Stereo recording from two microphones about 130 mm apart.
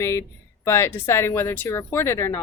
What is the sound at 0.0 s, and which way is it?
A woman's voice, 20° left (ahead or behind).